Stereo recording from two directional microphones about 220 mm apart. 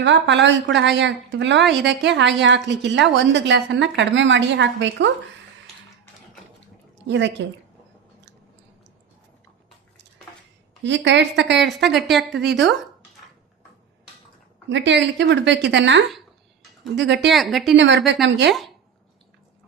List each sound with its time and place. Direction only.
0.0 s a woman's voice: 55° right (ahead or behind)
7.1 s a woman's voice: 55° right (ahead or behind)
10.8 s a woman's voice: 55° right (ahead or behind)
11.9 s a woman's voice: centre (ahead or behind)
12.3 s a woman's voice: 55° right (ahead or behind)
14.7 s a woman's voice: 55° right (ahead or behind)
17.3 s a woman's voice: centre (ahead or behind)
17.7 s a woman's voice: 55° right (ahead or behind)